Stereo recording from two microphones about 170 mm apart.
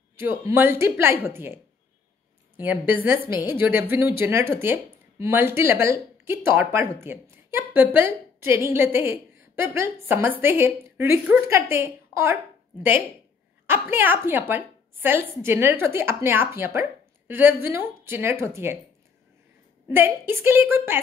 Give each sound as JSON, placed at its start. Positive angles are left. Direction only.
{"t": 0.2, "sound": "a woman's voice", "side_deg": -15}
{"t": 13.7, "sound": "speech", "side_deg": -10}
{"t": 19.9, "sound": "speech", "side_deg": -15}